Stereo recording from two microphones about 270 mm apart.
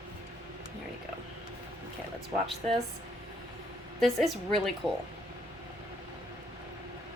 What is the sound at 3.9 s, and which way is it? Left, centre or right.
Speech, centre.